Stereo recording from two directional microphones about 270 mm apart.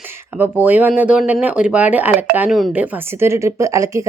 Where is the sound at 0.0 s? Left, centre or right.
Centre.